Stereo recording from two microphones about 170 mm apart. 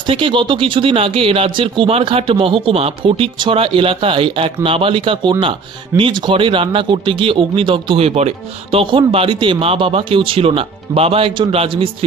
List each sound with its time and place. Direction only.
0.0 s speech: 30° right (ahead or behind)